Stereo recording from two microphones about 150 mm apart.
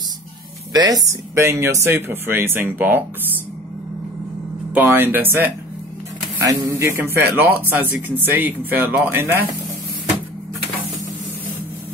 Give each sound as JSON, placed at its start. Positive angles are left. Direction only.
{"t": 0.7, "sound": "speech", "side_deg": -25}
{"t": 4.7, "sound": "speech", "side_deg": -10}